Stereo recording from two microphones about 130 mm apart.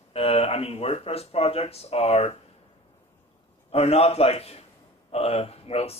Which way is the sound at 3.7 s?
50° left (ahead or behind).